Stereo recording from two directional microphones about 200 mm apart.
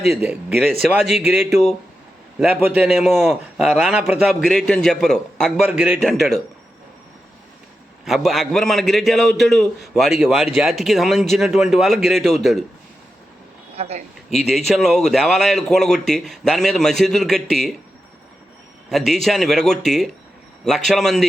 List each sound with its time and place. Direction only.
0.1 s speech: 10° right (ahead or behind)
0.7 s a man's voice: centre (ahead or behind)
1.2 s a man's voice: 10° right (ahead or behind)
5.6 s a man's voice: 5° right (ahead or behind)
8.0 s a man's voice: centre (ahead or behind)
13.7 s speech: 30° right (ahead or behind)
14.3 s a man's voice: centre (ahead or behind)
18.9 s a man's voice: centre (ahead or behind)